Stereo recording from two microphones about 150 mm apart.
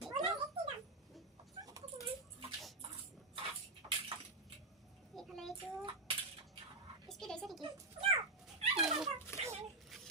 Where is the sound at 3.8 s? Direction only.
30° right (ahead or behind).